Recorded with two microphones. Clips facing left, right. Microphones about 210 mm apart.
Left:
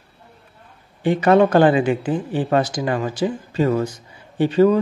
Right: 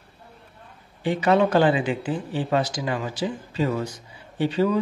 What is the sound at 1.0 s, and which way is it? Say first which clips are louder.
Speech: left 5 dB; 50° left (ahead or behind).